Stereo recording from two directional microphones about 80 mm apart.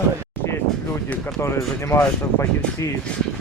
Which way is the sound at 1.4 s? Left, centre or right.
Left.